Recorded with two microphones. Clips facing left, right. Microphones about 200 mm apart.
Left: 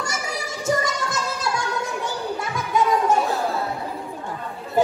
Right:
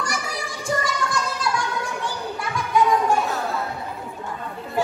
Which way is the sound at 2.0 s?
20° left (ahead or behind).